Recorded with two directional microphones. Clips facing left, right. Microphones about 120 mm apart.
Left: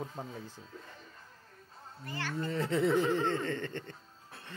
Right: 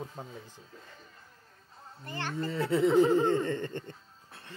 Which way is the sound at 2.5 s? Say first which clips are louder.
Right 3 dB; 5° right (ahead or behind).